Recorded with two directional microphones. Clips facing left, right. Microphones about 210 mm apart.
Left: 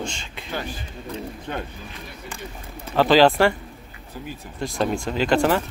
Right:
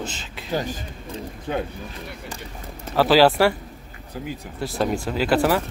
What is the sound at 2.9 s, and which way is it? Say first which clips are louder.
Speech: even; 5° right (ahead or behind).